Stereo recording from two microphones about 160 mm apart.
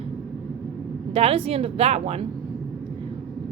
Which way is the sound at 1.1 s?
40° right (ahead or behind).